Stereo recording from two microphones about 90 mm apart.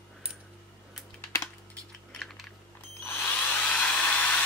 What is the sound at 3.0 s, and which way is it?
Drill, 20° left (ahead or behind).